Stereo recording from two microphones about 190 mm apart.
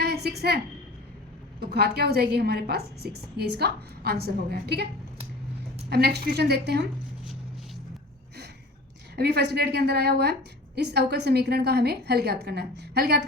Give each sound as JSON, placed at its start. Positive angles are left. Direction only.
{"t": 0.0, "sound": "a sound", "side_deg": -55}
{"t": 1.7, "sound": "a woman's voice", "side_deg": -55}
{"t": 5.9, "sound": "a woman's voice", "side_deg": -55}
{"t": 9.1, "sound": "a woman's voice", "side_deg": -60}